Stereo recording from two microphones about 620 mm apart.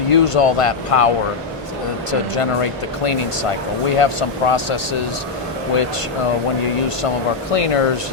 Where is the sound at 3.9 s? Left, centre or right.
Left.